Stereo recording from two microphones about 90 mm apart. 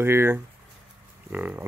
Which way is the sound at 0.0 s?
25° right (ahead or behind).